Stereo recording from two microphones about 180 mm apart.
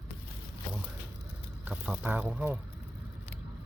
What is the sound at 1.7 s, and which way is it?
Speech, 10° right (ahead or behind).